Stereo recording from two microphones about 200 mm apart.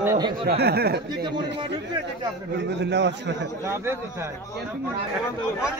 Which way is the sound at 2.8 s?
60° right (ahead or behind).